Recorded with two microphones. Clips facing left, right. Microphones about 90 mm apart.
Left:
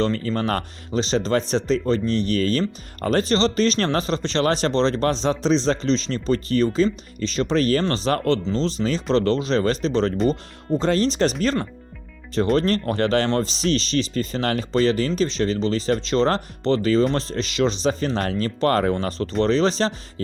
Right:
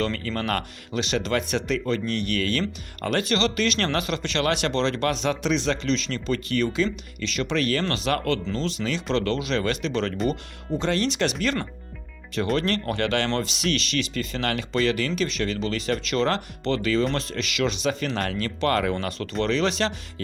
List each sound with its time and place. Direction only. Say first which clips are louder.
0.0 s speech: left 5 dB; 30° left (ahead or behind)